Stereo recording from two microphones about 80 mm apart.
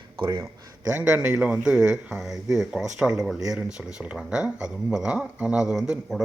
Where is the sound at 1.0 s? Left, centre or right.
Centre.